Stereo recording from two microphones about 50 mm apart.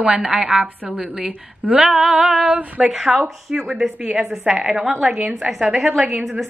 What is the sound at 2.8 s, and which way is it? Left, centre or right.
Speech, centre.